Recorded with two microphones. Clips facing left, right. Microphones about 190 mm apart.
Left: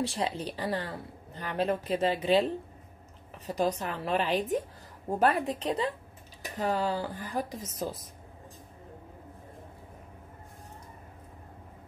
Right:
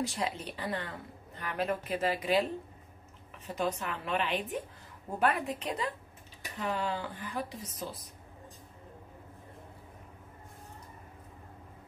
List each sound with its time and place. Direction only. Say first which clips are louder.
0.0 s a woman's voice: left 3 dB; 30° left (ahead or behind)
3.5 s a woman's voice: left 4 dB; 35° left (ahead or behind)